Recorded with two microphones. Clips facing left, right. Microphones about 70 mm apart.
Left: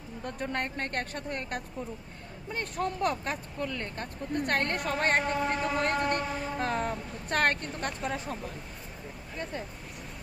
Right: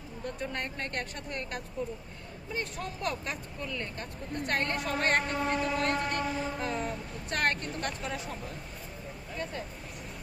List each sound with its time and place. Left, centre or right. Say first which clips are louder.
0.3 s speech: left 5 dB; left
2.5 s speech: left 4 dB; left